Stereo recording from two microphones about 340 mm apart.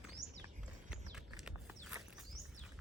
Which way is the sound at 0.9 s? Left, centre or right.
Centre.